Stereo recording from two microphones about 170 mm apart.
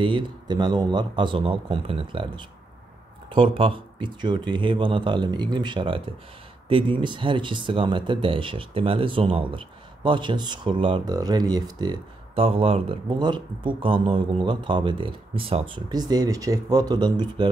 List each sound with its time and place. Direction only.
0.0 s speech: 25° right (ahead or behind)